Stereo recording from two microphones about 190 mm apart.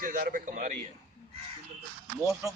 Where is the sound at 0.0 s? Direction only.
45° right (ahead or behind).